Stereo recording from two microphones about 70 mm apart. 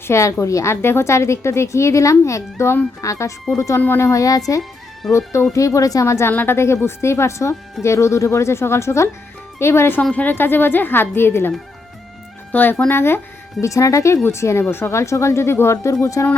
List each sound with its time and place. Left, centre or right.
0.1 s a woman's voice: left
3.8 s a woman's voice: left
4.0 s a woman's voice: left
6.3 s a woman's voice: left
6.6 s a woman's voice: left
10.0 s a woman's voice: centre
10.3 s a woman's voice: left
12.5 s speech: left
12.9 s speech: left
13.7 s a woman's voice: left